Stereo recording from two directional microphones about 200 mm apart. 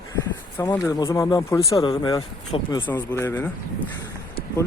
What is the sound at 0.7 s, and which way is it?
Speech, 15° left (ahead or behind).